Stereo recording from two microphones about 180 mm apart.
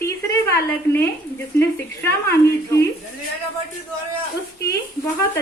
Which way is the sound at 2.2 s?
15° left (ahead or behind).